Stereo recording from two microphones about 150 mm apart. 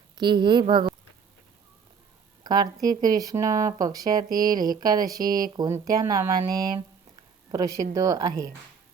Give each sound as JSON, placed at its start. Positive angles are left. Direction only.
{"t": 0.2, "sound": "speech", "side_deg": -30}
{"t": 2.4, "sound": "a woman's voice", "side_deg": -25}
{"t": 4.3, "sound": "speech", "side_deg": -70}
{"t": 4.8, "sound": "speech", "side_deg": -25}
{"t": 5.2, "sound": "speech", "side_deg": -70}
{"t": 5.5, "sound": "speech", "side_deg": -20}